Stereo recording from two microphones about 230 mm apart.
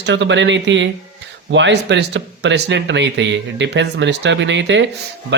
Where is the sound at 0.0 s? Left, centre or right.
Right.